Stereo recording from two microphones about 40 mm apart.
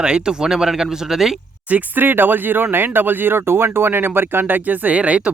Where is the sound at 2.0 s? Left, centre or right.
Right.